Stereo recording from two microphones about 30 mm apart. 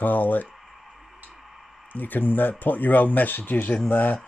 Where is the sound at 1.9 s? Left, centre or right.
Left.